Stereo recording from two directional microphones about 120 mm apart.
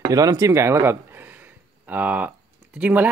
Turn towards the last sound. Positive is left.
turn(degrees=-10)  # may be behind; listen again after turning